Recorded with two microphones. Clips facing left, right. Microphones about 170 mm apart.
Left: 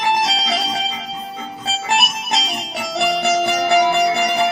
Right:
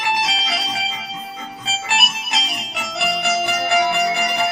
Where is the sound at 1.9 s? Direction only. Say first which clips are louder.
Left 5 dB; 40° left (ahead or behind).